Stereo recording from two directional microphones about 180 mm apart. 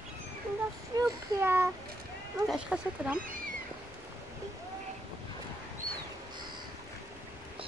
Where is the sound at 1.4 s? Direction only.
10° right (ahead or behind).